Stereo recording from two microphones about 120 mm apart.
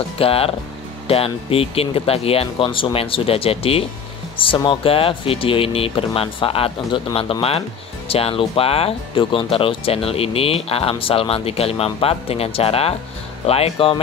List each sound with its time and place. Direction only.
0.2 s speech: 50° left (ahead or behind)